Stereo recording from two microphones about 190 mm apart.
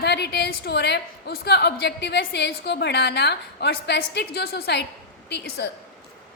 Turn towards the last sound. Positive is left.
turn(degrees=60)  # may be behind; listen again after turning